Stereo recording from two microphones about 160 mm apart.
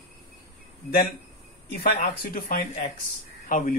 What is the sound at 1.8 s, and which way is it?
Speech, 60° left (ahead or behind).